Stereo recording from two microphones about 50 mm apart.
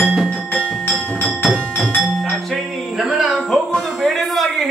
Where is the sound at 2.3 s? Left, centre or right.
Centre.